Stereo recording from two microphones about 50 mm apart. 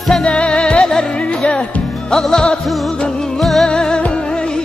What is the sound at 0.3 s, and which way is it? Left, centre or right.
Music, centre.